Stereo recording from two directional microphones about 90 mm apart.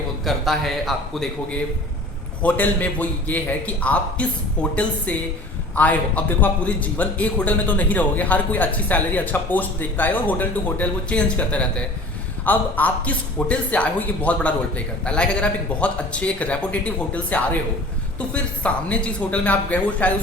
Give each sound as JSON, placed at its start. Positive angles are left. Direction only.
{"t": 0.3, "sound": "a man's voice", "side_deg": 0}
{"t": 2.4, "sound": "a man's voice", "side_deg": 15}